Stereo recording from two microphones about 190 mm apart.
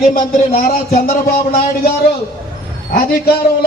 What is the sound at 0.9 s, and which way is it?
Speech, 50° left (ahead or behind).